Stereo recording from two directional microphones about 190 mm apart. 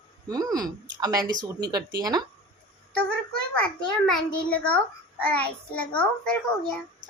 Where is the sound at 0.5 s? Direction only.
20° right (ahead or behind).